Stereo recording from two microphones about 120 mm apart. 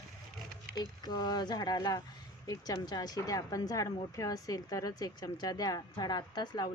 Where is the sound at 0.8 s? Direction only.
35° left (ahead or behind).